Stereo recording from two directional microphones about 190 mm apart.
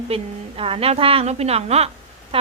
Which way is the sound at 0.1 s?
30° right (ahead or behind).